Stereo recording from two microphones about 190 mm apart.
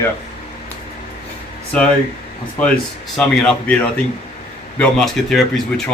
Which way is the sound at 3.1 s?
5° left (ahead or behind).